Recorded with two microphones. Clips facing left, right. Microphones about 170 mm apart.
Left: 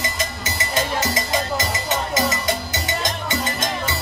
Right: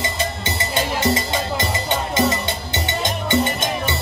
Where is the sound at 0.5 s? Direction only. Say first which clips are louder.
Left 1 dB; 25° right (ahead or behind).